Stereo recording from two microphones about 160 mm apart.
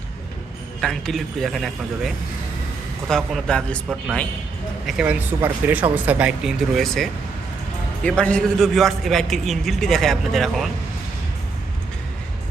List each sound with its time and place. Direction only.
0.8 s a man's voice: 5° left (ahead or behind)
4.9 s a man's voice: 5° right (ahead or behind)